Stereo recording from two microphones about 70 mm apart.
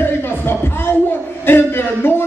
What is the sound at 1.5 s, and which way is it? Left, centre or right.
Speech, left.